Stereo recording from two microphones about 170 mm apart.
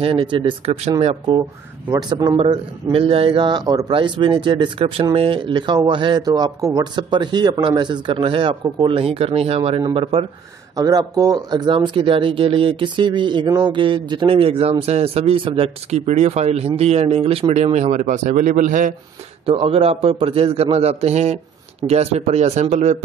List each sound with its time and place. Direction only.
0.0 s a man's voice: 30° right (ahead or behind); by 18.9 s 50° right (ahead or behind)
19.4 s a man's voice: 35° right (ahead or behind)